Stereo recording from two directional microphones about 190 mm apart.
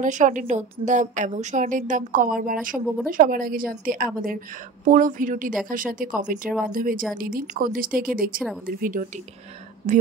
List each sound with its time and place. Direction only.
0.0 s a woman's voice: 40° right (ahead or behind)